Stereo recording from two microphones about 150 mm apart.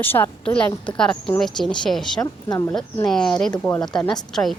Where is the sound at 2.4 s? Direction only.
25° left (ahead or behind).